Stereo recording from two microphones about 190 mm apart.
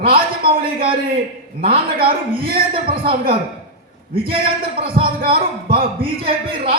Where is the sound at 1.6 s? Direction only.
30° right (ahead or behind).